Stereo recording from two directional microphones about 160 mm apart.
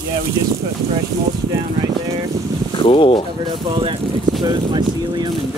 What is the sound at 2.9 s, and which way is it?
Speech, 30° left (ahead or behind).